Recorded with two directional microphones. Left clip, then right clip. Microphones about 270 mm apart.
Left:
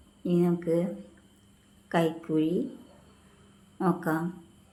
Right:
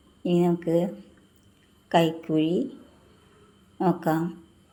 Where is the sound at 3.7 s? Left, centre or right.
Centre.